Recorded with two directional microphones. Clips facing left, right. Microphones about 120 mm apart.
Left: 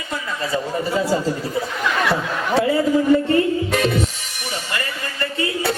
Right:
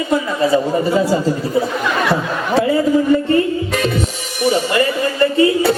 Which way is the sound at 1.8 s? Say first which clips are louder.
Right 3 dB; 35° right (ahead or behind).